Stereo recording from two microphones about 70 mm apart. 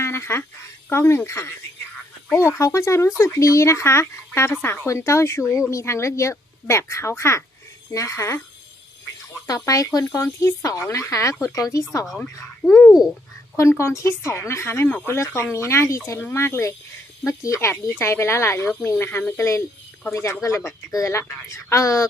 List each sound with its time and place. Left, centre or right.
0.0 s a sound: left
0.9 s speech: left
2.6 s speech: left
9.6 s speech: left
12.0 s speech: centre
12.6 s a sound: centre
13.6 s speech: left